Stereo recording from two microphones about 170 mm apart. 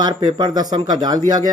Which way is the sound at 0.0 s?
30° right (ahead or behind).